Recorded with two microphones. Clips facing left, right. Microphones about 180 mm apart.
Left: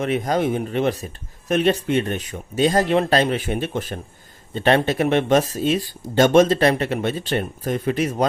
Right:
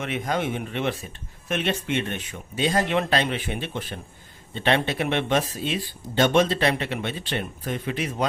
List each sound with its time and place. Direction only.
0.0 s speech: 40° left (ahead or behind)